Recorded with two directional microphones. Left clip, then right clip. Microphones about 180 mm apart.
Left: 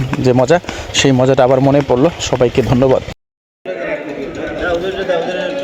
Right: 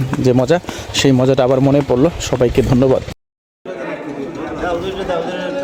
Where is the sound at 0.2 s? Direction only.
5° right (ahead or behind).